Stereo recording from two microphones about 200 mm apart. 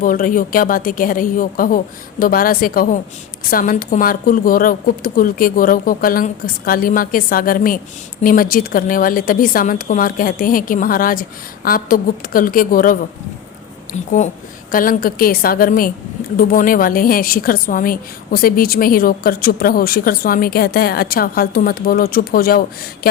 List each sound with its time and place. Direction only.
0.0 s a woman's voice: 40° left (ahead or behind)